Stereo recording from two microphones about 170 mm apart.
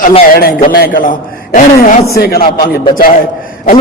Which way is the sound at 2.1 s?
65° left (ahead or behind).